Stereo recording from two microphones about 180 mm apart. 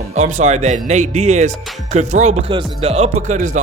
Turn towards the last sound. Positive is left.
turn(degrees=-45)  # may be behind; listen again after turning